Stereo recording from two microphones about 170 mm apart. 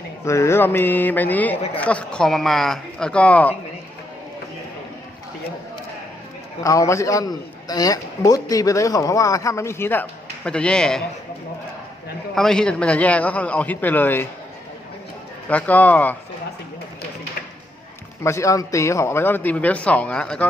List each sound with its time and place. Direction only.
0.3 s speech: 15° left (ahead or behind)
6.6 s a man's voice: 20° left (ahead or behind)
12.3 s speech: centre (ahead or behind)
15.4 s speech: 10° left (ahead or behind)
18.2 s speech: 15° left (ahead or behind)